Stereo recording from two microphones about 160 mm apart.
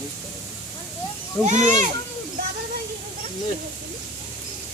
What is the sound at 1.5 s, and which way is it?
Speech, 50° right (ahead or behind).